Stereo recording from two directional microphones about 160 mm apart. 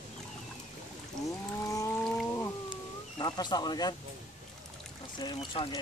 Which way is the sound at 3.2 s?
25° left (ahead or behind).